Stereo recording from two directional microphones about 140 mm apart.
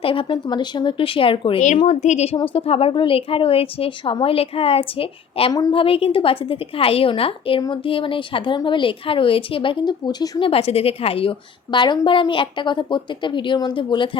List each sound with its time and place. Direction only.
0.0 s a woman's voice: 40° left (ahead or behind)
1.8 s a woman's voice: 55° left (ahead or behind); by 10.5 s 30° left (ahead or behind)
10.5 s a woman's voice: 45° left (ahead or behind)